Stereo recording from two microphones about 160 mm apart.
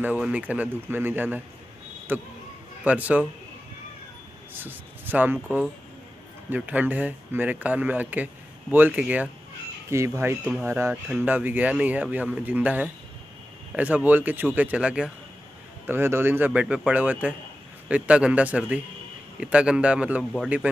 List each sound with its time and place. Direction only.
0.0 s a man's voice: 10° right (ahead or behind)
4.6 s a man's voice: 10° right (ahead or behind)